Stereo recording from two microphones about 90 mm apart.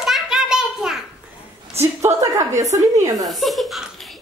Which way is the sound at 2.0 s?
35° right (ahead or behind).